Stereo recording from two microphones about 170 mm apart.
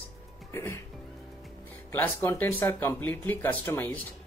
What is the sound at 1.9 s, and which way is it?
Speech, 10° left (ahead or behind).